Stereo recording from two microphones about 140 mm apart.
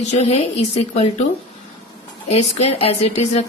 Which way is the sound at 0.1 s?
50° left (ahead or behind).